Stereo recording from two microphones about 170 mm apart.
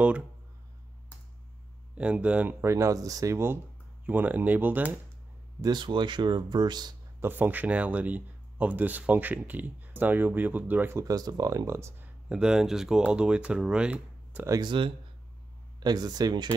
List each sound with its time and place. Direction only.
2.0 s speech: 5° right (ahead or behind)
5.6 s speech: 25° right (ahead or behind)
7.2 s speech: 10° right (ahead or behind)
14.6 s speech: 30° right (ahead or behind)